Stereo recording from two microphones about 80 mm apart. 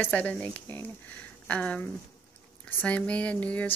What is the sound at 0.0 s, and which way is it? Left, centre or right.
Speech, centre.